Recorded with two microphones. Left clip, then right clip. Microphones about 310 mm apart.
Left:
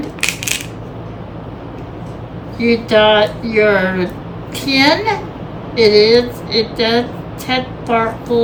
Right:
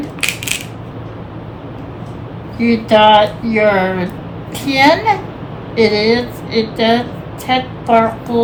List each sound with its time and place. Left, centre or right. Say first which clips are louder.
0.2 s coin: even; centre
2.6 s a woman's voice: right 1 dB; centre